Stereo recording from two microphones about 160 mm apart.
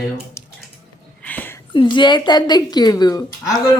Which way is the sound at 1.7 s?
30° left (ahead or behind).